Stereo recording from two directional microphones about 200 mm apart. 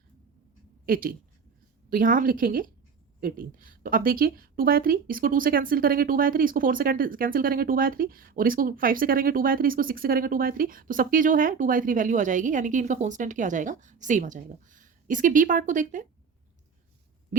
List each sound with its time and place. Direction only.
0.9 s speech: 45° right (ahead or behind)